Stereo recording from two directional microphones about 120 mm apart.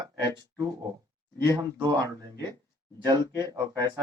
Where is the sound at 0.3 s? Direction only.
30° right (ahead or behind).